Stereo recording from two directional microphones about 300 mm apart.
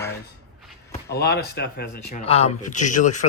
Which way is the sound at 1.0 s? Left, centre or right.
Left.